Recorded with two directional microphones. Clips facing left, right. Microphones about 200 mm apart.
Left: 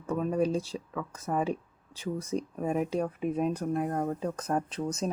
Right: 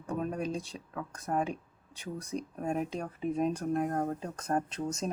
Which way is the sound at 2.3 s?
40° left (ahead or behind).